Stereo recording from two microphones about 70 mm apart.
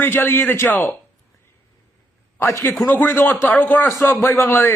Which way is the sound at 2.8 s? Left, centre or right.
Left.